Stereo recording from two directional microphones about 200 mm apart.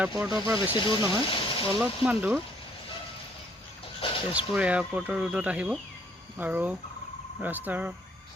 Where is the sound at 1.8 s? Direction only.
10° right (ahead or behind).